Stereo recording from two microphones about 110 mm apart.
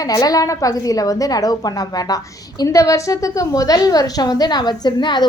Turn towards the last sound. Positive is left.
turn(degrees=40)  # may be behind; listen again after turning